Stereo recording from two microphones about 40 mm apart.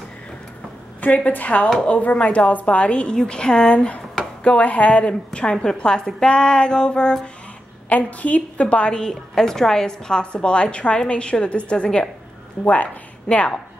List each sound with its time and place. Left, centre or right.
1.0 s a woman's voice: left
5.0 s a woman's voice: left
7.9 s a woman's voice: left